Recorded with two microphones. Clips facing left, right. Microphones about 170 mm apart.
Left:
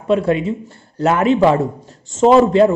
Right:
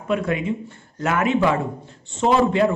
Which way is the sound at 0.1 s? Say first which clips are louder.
Left 6 dB; 30° left (ahead or behind).